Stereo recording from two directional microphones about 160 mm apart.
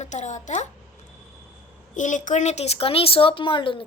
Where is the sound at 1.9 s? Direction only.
50° left (ahead or behind); by 3.8 s 30° left (ahead or behind).